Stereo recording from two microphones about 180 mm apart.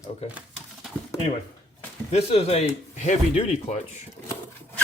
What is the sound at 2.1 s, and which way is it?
Speech, 35° left (ahead or behind).